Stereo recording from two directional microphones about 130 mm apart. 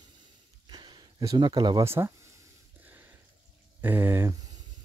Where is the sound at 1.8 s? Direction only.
20° right (ahead or behind).